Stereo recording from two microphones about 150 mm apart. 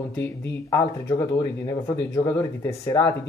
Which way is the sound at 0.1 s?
15° left (ahead or behind).